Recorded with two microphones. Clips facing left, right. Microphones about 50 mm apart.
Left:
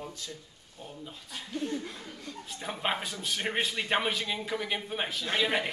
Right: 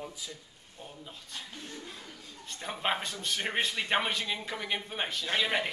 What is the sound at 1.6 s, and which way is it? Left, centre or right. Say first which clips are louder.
Speech: left 10 dB; left.